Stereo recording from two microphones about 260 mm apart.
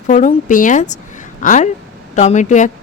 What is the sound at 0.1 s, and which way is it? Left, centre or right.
Speech, left.